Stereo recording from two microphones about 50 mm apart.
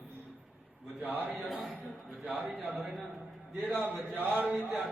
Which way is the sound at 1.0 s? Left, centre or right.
Right.